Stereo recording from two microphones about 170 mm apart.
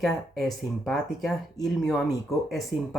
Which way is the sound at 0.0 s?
Centre (ahead or behind).